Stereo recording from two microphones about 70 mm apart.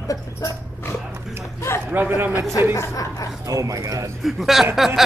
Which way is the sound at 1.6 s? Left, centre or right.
Left.